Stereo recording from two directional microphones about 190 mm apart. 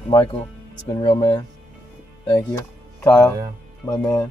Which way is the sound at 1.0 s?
20° left (ahead or behind).